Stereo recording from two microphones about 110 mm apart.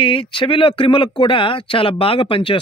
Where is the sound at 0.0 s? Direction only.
50° left (ahead or behind).